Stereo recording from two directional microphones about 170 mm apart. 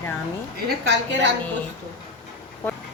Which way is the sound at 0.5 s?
90° right.